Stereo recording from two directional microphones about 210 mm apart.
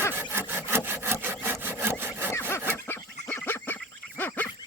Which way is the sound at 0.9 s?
10° right (ahead or behind).